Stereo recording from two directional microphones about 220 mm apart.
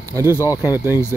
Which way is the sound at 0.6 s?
10° right (ahead or behind).